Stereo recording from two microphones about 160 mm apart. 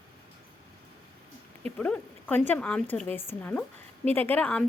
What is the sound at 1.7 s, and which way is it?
A woman's voice, 10° left (ahead or behind).